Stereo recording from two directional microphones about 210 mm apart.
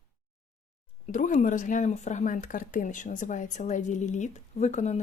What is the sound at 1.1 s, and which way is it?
Speech, 40° left (ahead or behind).